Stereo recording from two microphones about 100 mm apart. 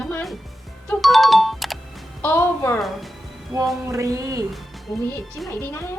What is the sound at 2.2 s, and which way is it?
Speech, 20° left (ahead or behind).